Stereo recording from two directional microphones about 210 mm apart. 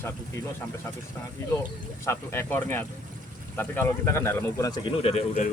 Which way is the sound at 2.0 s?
10° left (ahead or behind).